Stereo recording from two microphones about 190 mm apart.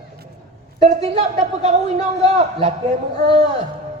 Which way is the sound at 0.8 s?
35° right (ahead or behind).